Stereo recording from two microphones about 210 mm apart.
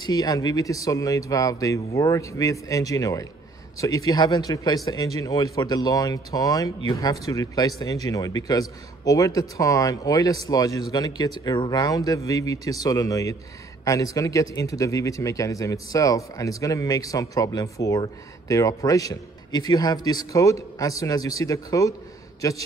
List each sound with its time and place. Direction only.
0.0 s speech: 20° left (ahead or behind)